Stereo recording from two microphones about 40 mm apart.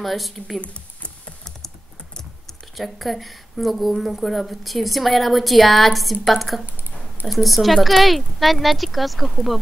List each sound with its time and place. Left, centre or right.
0.0 s speech: centre
2.8 s speech: centre
6.6 s a sound: right
7.3 s speech: centre